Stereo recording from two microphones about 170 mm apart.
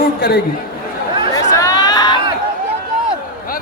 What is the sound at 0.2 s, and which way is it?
Speech, 70° left (ahead or behind).